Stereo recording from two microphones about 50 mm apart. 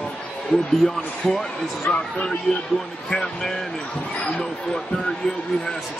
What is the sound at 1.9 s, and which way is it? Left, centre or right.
Speech, left.